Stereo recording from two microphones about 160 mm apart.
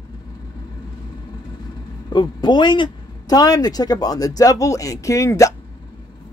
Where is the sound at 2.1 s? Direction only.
30° left (ahead or behind).